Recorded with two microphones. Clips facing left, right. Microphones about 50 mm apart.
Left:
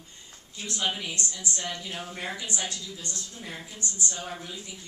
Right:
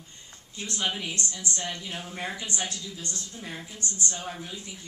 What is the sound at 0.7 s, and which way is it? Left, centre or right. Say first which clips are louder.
A woman's voice: even; centre.